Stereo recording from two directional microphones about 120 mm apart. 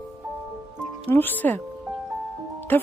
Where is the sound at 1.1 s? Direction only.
15° left (ahead or behind).